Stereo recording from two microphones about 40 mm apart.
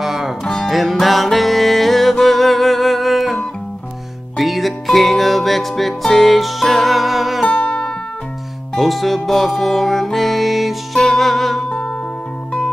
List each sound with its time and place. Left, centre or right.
0.0 s music: centre
0.4 s music: centre
7.4 s music: left
8.7 s music: centre